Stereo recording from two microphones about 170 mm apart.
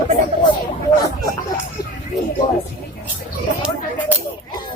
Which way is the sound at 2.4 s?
55° left (ahead or behind).